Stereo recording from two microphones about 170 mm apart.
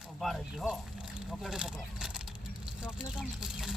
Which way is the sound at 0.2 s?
Centre (ahead or behind).